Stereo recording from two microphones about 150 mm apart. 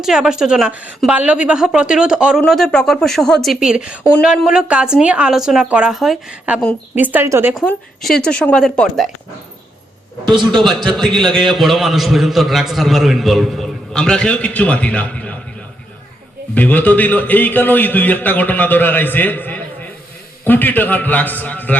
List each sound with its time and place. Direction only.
0.0 s a man's voice: 5° right (ahead or behind)
7.5 s a man's voice: 5° left (ahead or behind)
10.2 s a man's voice: 30° right (ahead or behind)
10.6 s a man's voice: centre (ahead or behind)
16.6 s a man's voice: 10° left (ahead or behind)